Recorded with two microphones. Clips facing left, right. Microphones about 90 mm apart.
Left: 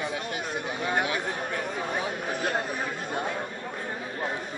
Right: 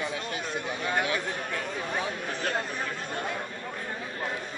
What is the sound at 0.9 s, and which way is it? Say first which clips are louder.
Chatter: left 1 dB; 25° left (ahead or behind).